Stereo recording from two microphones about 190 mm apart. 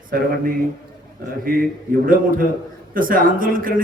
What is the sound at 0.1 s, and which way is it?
Speech, 50° right (ahead or behind).